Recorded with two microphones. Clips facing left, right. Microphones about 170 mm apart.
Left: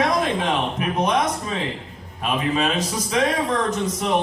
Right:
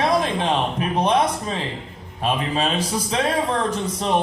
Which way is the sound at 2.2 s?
30° right (ahead or behind).